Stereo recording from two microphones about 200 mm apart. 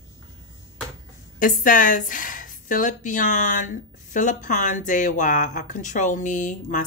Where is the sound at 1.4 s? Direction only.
40° left (ahead or behind).